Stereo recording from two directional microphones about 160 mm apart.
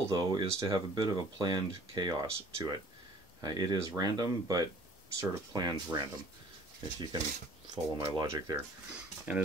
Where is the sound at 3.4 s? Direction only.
25° right (ahead or behind).